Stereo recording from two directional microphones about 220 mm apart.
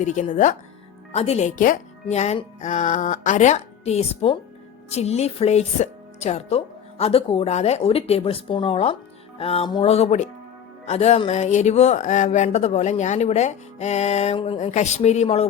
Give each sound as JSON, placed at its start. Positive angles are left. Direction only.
{"t": 0.0, "sound": "speech", "side_deg": 35}